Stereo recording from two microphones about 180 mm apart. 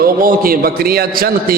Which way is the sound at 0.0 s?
50° right (ahead or behind).